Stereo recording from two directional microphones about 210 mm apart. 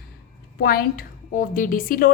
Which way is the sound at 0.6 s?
45° left (ahead or behind).